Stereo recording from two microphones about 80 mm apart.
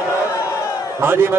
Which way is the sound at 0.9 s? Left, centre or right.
Right.